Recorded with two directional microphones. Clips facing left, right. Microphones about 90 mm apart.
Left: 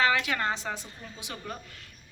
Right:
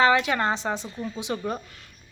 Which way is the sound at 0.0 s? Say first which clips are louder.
Right 6 dB; 25° right (ahead or behind).